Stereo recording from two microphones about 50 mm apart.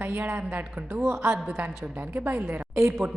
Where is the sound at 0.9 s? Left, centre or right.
Right.